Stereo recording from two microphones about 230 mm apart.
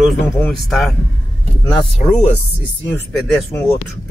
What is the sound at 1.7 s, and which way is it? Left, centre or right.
Speech, left.